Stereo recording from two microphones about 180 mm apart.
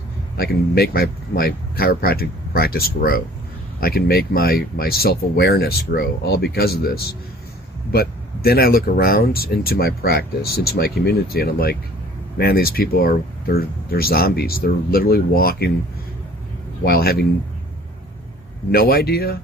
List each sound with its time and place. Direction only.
0.3 s speech: 60° left (ahead or behind)
16.8 s speech: 60° left (ahead or behind)
18.7 s speech: 55° left (ahead or behind)